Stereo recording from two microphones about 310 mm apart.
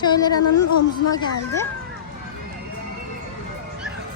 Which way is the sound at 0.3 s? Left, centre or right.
Left.